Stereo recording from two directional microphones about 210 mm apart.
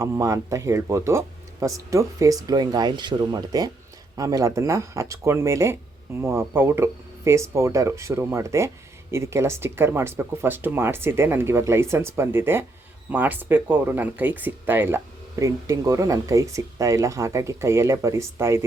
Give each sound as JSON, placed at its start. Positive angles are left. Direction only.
{"t": 0.0, "sound": "speech", "side_deg": -15}